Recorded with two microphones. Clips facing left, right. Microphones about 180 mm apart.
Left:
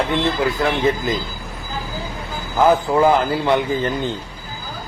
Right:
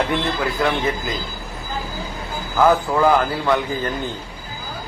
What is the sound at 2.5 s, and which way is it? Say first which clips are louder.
A man's voice: left 1 dB; 20° left (ahead or behind).